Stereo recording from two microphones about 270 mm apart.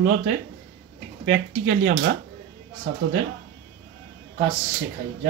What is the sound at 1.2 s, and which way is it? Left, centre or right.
Speech, right.